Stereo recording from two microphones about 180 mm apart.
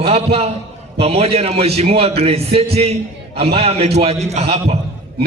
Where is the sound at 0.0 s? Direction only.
35° right (ahead or behind).